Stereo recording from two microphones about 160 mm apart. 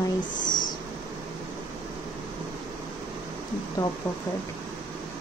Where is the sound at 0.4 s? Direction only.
55° left (ahead or behind).